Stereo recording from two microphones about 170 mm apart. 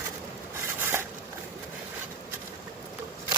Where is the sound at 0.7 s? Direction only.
15° right (ahead or behind).